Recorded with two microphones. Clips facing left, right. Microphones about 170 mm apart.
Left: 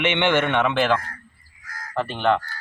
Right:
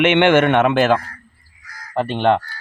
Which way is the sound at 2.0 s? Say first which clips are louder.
Right 5 dB; 35° right (ahead or behind).